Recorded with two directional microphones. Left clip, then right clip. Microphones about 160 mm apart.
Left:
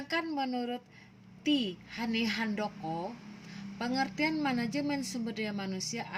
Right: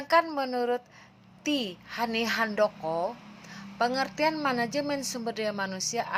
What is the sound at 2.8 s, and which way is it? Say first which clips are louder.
Speech: right 8 dB; 20° right (ahead or behind).